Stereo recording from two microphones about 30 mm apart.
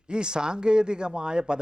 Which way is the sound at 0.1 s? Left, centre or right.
Right.